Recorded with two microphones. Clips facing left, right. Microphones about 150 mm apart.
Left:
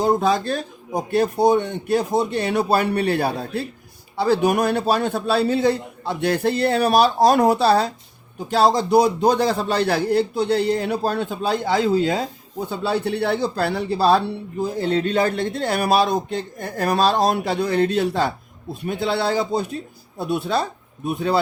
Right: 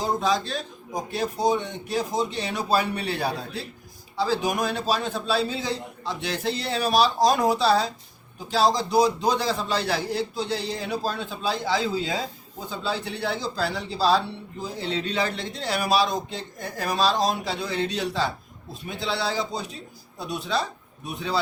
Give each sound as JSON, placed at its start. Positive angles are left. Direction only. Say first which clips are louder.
{"t": 0.0, "sound": "a man's voice", "louder": "left 6 dB", "side_deg": 55}